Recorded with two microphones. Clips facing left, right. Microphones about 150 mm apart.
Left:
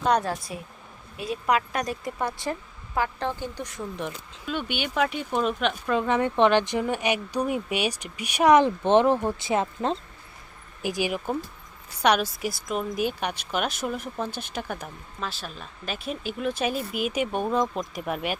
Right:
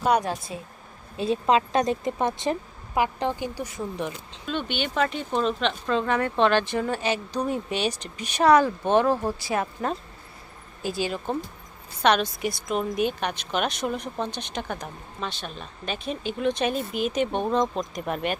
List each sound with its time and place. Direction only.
0.0 s a woman's voice: 10° right (ahead or behind)
0.5 s a woman's voice: 25° right (ahead or behind); by 18.3 s 5° left (ahead or behind)